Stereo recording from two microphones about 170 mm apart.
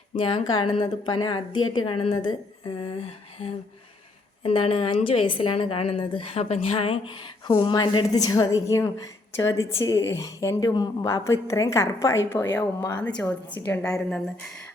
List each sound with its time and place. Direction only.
0.2 s a woman's voice: 30° left (ahead or behind)
4.4 s a woman's voice: 35° left (ahead or behind); by 14.2 s 5° left (ahead or behind)